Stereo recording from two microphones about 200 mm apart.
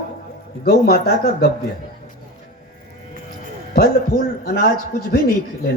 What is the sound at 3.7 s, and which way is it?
A man's voice, 50° left (ahead or behind).